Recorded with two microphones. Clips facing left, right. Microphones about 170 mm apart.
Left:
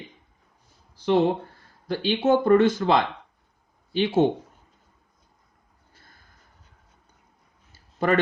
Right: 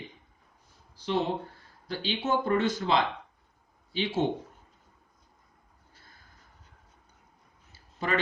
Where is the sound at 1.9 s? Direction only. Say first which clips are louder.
Left 8 dB; 55° left (ahead or behind).